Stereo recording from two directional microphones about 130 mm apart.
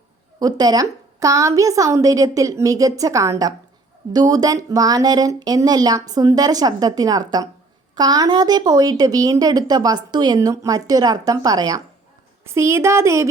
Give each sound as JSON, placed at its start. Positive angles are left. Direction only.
{"t": 0.3, "sound": "speech", "side_deg": -30}